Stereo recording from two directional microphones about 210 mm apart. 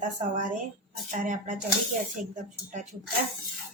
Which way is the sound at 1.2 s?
40° right (ahead or behind).